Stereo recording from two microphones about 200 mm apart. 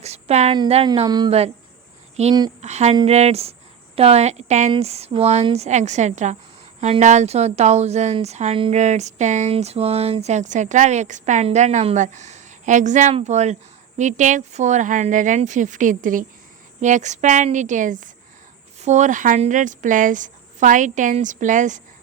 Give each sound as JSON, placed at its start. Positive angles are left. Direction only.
{"t": 0.0, "sound": "speech", "side_deg": -30}
{"t": 0.6, "sound": "a sound", "side_deg": -25}
{"t": 2.2, "sound": "speech", "side_deg": -35}